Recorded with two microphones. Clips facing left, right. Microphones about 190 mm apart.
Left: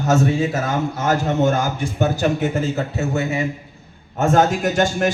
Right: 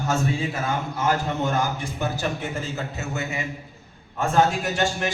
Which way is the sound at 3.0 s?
35° left (ahead or behind).